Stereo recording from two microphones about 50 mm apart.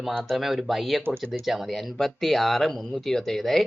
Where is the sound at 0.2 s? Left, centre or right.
Centre.